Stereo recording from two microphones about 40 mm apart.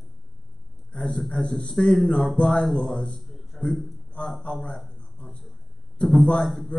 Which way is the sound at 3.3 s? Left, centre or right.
Centre.